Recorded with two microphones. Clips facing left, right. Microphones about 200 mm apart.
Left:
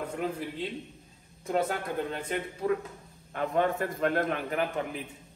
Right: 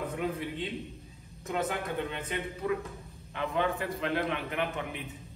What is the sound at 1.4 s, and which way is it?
Speech, 35° left (ahead or behind).